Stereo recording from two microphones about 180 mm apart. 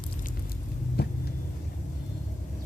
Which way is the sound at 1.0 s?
65° left (ahead or behind).